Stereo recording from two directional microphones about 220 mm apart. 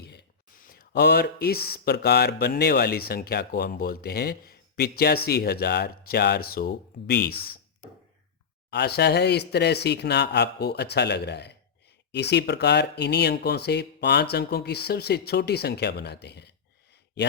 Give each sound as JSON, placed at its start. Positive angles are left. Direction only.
{"t": 0.0, "sound": "speech", "side_deg": 50}
{"t": 8.7, "sound": "speech", "side_deg": 50}